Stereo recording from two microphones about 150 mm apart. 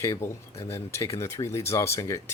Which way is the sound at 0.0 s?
20° left (ahead or behind).